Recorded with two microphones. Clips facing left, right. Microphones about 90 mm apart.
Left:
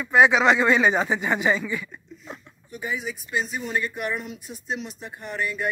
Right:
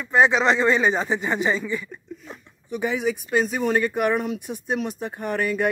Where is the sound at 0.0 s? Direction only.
5° left (ahead or behind).